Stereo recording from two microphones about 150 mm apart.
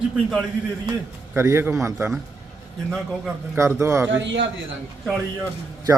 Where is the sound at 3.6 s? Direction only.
20° right (ahead or behind).